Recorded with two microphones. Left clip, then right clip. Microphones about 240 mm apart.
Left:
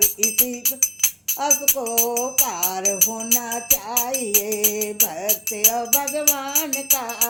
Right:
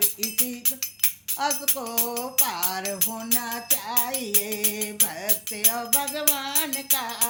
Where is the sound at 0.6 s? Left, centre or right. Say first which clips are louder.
Left 9 dB; centre.